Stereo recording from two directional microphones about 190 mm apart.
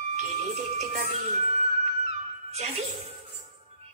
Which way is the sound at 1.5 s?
35° right (ahead or behind).